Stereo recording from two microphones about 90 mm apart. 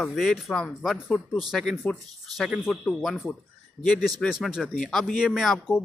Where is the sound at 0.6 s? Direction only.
15° left (ahead or behind).